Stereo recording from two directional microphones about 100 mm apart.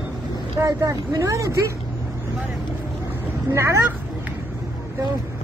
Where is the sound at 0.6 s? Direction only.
35° right (ahead or behind).